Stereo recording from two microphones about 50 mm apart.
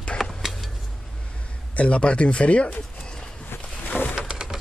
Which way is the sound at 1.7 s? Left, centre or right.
Left.